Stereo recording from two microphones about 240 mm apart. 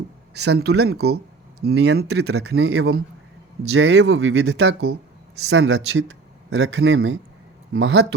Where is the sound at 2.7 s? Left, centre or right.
Right.